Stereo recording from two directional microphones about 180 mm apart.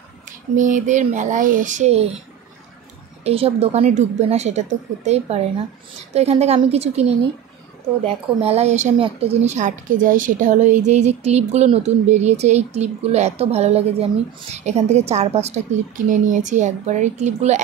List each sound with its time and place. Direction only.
0.6 s speech: 45° right (ahead or behind)
3.3 s a woman's voice: 35° right (ahead or behind)